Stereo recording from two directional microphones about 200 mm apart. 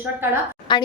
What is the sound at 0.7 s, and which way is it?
Speech, 25° left (ahead or behind).